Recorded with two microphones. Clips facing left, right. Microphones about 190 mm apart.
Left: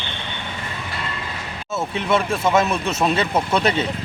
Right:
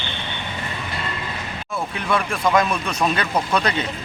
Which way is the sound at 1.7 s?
25° left (ahead or behind).